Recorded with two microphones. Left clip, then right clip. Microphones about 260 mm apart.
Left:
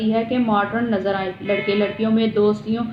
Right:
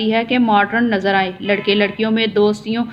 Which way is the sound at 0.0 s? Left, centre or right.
Right.